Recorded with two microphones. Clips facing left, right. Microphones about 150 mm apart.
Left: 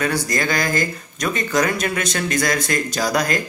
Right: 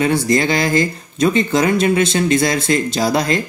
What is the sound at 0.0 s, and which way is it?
Speech, 25° right (ahead or behind).